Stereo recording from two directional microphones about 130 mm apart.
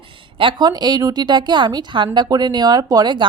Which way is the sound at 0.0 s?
40° right (ahead or behind).